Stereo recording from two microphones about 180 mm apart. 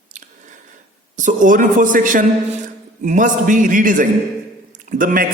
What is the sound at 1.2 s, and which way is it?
A man's voice, 45° right (ahead or behind).